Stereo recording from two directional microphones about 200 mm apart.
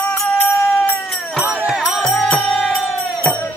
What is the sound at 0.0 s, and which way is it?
Music, 10° left (ahead or behind).